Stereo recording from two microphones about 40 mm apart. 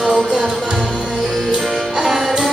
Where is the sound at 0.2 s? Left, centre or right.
Centre.